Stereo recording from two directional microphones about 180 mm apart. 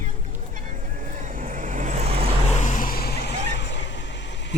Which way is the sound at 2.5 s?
45° left (ahead or behind).